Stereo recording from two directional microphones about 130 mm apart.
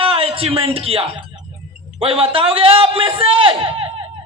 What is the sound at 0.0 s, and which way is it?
A man's voice, 45° right (ahead or behind).